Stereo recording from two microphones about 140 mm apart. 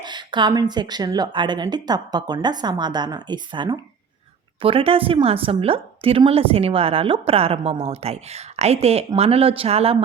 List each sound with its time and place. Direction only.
0.0 s a woman's voice: 30° right (ahead or behind)